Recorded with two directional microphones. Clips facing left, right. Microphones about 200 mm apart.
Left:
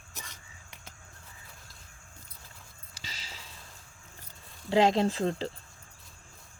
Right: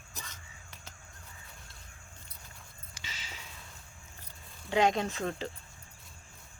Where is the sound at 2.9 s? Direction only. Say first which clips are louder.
Left 1 dB; 35° left (ahead or behind).